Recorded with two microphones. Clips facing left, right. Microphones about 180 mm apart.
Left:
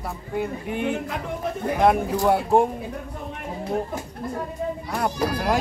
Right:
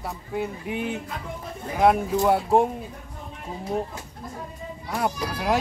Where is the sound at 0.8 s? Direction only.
70° left (ahead or behind).